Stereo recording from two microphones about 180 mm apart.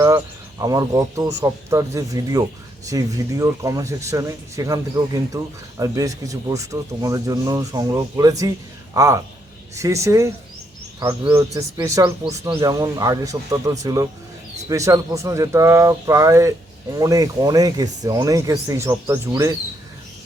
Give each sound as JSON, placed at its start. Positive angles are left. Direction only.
{"t": 0.6, "sound": "speech", "side_deg": -20}